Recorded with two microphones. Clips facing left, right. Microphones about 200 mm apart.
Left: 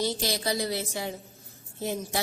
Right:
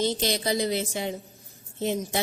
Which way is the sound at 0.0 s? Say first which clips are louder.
Right 3 dB; 20° right (ahead or behind).